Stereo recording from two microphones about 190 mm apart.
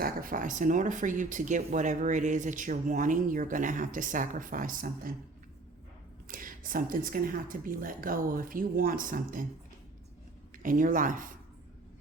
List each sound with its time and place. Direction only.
0.0 s speech: 45° right (ahead or behind)
6.2 s speech: 45° right (ahead or behind)
10.6 s speech: 45° right (ahead or behind)